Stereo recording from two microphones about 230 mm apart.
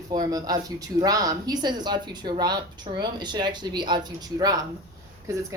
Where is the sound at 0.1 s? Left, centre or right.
Centre.